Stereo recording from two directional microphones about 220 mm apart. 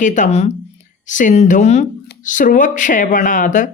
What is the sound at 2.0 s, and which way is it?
Speech, 40° left (ahead or behind).